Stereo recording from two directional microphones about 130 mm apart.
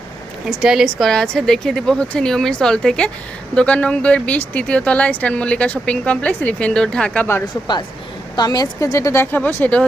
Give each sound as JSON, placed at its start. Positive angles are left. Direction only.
{"t": 0.4, "sound": "a woman's voice", "side_deg": -5}
{"t": 7.4, "sound": "speech", "side_deg": 35}